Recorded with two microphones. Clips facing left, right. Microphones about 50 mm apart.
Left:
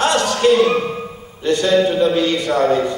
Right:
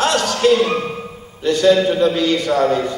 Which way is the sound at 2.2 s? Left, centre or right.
Left.